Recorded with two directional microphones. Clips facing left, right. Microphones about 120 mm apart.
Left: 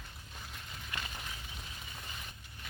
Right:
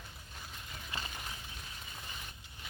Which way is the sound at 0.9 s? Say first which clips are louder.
Even; 30° right (ahead or behind).